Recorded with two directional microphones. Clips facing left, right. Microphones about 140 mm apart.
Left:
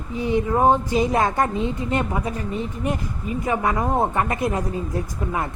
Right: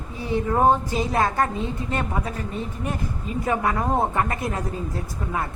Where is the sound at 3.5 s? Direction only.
15° left (ahead or behind).